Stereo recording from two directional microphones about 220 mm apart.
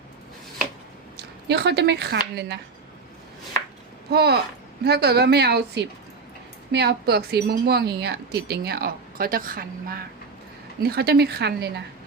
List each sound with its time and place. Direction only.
1.1 s a woman's voice: 50° right (ahead or behind)
4.1 s a woman's voice: 45° right (ahead or behind)